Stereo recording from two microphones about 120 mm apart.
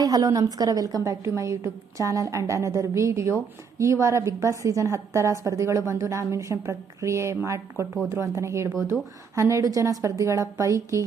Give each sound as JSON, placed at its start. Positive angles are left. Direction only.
{"t": 0.0, "sound": "a woman's voice", "side_deg": -30}